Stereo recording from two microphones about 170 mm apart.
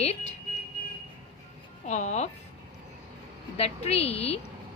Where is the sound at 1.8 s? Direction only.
45° left (ahead or behind).